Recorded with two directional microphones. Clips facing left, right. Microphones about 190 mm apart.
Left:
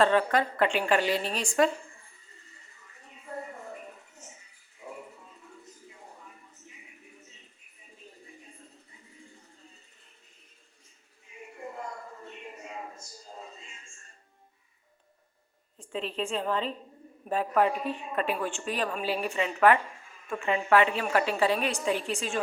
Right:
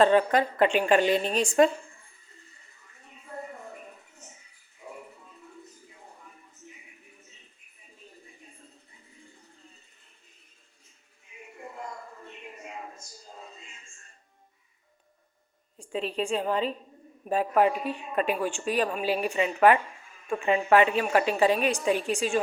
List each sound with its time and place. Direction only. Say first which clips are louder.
0.0 s a woman's voice: right 3 dB; 20° right (ahead or behind)
15.8 s a woman's voice: right 3 dB; 10° right (ahead or behind)